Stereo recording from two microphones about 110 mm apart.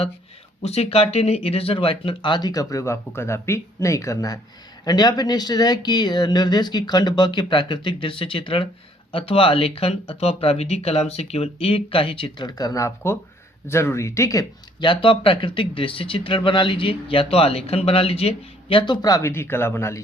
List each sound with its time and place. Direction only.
0.6 s speech: 70° left (ahead or behind); by 14.4 s 30° left (ahead or behind)
14.8 s speech: 45° left (ahead or behind)
19.0 s speech: 35° left (ahead or behind)
19.3 s speech: 20° left (ahead or behind)